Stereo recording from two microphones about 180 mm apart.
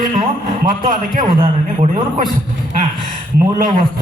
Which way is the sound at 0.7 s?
50° right (ahead or behind).